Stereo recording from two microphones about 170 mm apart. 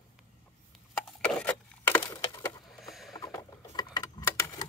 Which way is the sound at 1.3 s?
5° left (ahead or behind).